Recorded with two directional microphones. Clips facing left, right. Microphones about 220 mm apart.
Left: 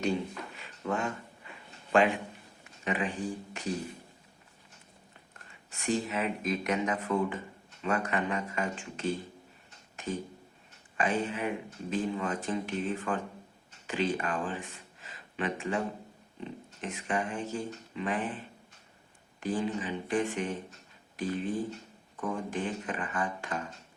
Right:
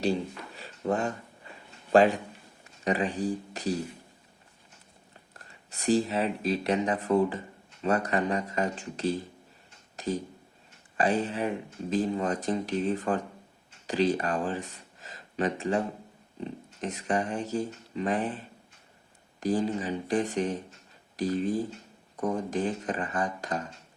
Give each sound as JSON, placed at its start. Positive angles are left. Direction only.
{"t": 0.0, "sound": "a sound", "side_deg": -35}
{"t": 1.9, "sound": "a man's voice", "side_deg": -35}
{"t": 5.7, "sound": "speech", "side_deg": -35}
{"t": 9.9, "sound": "a sound", "side_deg": -35}
{"t": 10.9, "sound": "speech", "side_deg": -35}
{"t": 19.4, "sound": "speech", "side_deg": -40}